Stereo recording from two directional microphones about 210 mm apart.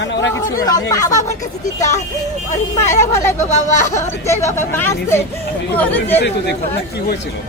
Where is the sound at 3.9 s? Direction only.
15° left (ahead or behind).